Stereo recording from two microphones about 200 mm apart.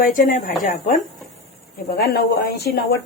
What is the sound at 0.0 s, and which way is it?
Speech, 45° left (ahead or behind).